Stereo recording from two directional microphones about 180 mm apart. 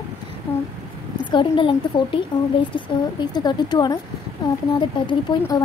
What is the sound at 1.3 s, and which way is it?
A woman's voice, 30° left (ahead or behind).